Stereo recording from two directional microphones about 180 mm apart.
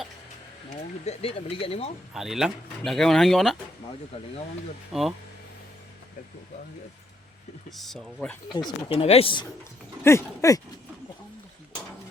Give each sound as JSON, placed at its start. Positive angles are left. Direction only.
{"t": 1.0, "sound": "speech", "side_deg": 35}
{"t": 2.1, "sound": "speech", "side_deg": 0}
{"t": 4.9, "sound": "speech", "side_deg": 0}
{"t": 7.7, "sound": "speech", "side_deg": 0}
{"t": 8.5, "sound": "speech", "side_deg": 30}
{"t": 10.0, "sound": "speech", "side_deg": 15}